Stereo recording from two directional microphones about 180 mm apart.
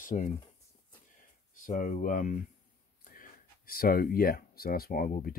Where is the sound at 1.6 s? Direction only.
45° left (ahead or behind).